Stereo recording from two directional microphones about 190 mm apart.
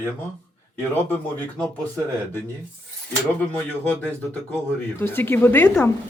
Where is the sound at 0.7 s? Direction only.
10° left (ahead or behind).